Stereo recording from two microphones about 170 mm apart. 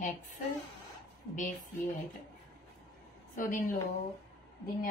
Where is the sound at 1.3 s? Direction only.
50° left (ahead or behind).